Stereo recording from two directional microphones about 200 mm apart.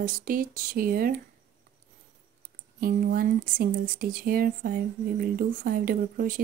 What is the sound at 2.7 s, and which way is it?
Speech, 45° right (ahead or behind).